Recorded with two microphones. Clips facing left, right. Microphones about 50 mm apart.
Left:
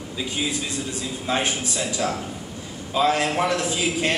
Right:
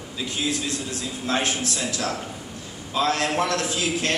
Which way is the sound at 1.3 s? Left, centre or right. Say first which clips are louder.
Even; centre.